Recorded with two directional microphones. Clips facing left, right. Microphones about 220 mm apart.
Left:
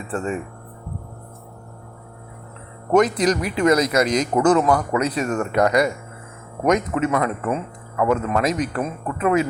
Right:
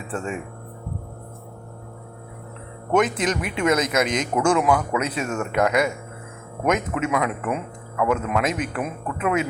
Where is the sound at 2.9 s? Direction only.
5° right (ahead or behind).